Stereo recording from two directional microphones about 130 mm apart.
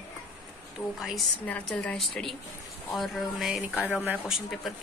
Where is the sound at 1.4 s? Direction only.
10° left (ahead or behind).